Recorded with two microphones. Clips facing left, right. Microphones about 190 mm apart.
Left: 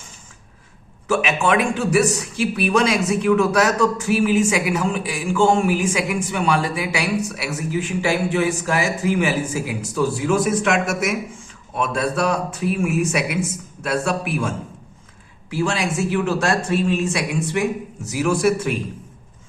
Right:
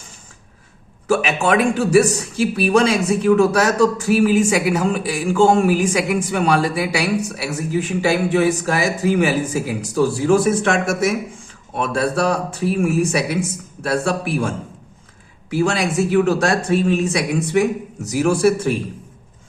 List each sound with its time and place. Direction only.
1.0 s a man's voice: 35° right (ahead or behind)
15.6 s a man's voice: 40° right (ahead or behind)